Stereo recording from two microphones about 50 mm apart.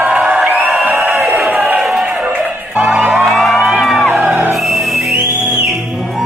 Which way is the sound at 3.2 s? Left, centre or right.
Centre.